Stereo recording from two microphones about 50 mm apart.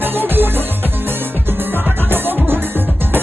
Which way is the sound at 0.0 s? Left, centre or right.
Right.